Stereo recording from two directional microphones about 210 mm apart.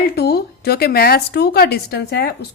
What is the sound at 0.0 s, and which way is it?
A woman's voice, 50° left (ahead or behind).